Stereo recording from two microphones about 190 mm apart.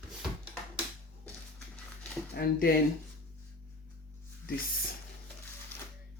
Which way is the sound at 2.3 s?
50° left (ahead or behind).